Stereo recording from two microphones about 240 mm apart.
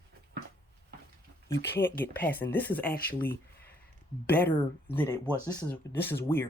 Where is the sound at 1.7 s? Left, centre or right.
Centre.